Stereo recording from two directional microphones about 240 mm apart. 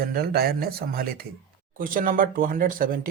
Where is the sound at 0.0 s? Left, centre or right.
Right.